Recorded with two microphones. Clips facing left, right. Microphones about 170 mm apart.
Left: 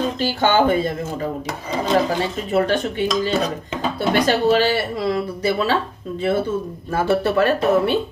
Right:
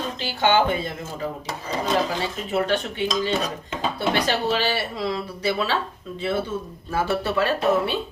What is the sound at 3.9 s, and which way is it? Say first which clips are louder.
Speech: left 6 dB; 45° left (ahead or behind).